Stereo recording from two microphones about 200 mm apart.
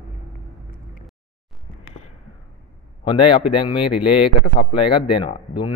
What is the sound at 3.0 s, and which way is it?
Speech, 25° left (ahead or behind).